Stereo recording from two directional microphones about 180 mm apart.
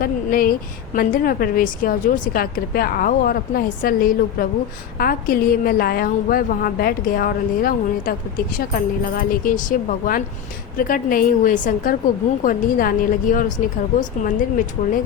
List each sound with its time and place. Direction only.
0.0 s a woman's voice: 55° left (ahead or behind)